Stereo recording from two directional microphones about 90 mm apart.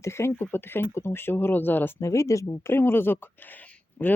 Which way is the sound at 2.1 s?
35° left (ahead or behind).